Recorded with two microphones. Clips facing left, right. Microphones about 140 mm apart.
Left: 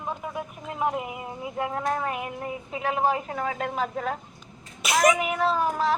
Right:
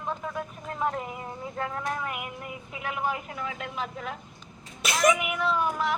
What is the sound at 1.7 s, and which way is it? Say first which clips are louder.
A woman's voice: left 5 dB; 30° left (ahead or behind).